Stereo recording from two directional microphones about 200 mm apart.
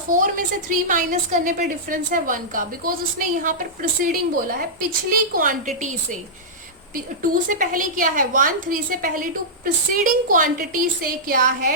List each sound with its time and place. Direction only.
0.7 s a woman's voice: 40° right (ahead or behind)